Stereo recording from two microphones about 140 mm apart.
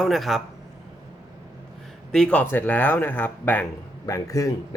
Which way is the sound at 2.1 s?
5° left (ahead or behind).